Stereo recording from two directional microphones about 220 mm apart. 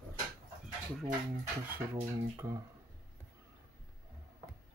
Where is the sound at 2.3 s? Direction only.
15° right (ahead or behind).